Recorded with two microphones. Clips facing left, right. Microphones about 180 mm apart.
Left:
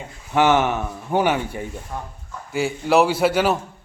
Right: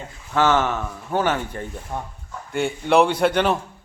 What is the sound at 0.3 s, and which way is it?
A man's voice, 15° left (ahead or behind).